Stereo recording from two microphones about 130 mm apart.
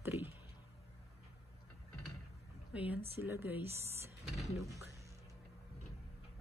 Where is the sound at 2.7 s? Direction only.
10° right (ahead or behind).